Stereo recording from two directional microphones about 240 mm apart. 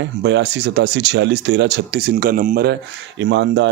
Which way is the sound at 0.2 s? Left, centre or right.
Right.